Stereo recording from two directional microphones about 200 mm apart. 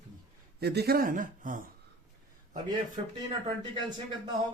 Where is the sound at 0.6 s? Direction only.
55° right (ahead or behind).